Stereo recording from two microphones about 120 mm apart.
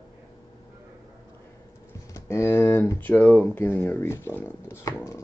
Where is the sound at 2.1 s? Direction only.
20° left (ahead or behind).